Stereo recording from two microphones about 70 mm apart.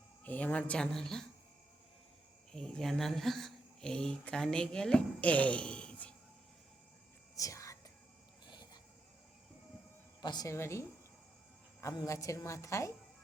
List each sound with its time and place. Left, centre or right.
0.3 s speech: left
2.5 s speech: centre
7.3 s whispering: left
8.4 s a sound: left
10.2 s a woman's voice: left
10.4 s a woman's voice: left
12.0 s a woman's voice: left